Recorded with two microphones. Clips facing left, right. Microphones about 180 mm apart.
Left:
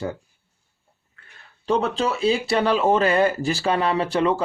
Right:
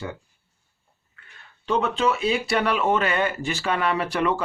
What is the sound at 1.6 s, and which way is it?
Speech, 35° left (ahead or behind).